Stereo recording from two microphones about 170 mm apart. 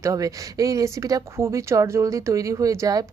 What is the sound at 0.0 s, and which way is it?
Speech, 20° right (ahead or behind).